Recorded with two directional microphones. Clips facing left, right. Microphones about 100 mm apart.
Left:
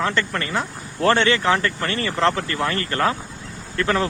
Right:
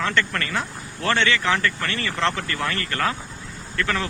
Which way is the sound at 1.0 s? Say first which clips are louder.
Left 4 dB; 35° left (ahead or behind).